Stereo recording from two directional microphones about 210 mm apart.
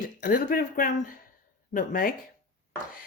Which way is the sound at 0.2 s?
45° left (ahead or behind).